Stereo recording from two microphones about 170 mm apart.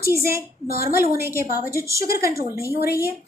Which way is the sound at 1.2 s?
15° right (ahead or behind).